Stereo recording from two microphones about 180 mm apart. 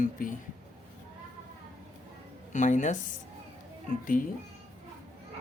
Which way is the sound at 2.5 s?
45° left (ahead or behind).